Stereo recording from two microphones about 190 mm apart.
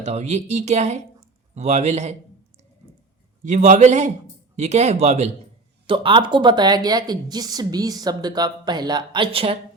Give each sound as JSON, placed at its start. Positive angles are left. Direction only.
{"t": 0.0, "sound": "a woman's voice", "side_deg": -35}
{"t": 3.4, "sound": "a woman's voice", "side_deg": -40}